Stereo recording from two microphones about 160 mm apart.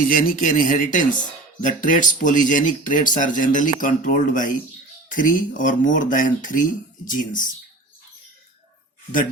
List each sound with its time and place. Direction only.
0.1 s speech: 55° left (ahead or behind)